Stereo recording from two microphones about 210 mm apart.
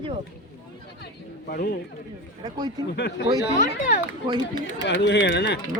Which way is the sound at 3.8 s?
40° left (ahead or behind).